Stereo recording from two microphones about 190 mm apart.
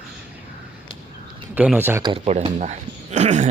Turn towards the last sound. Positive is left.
turn(degrees=-40)  # may be behind; listen again after turning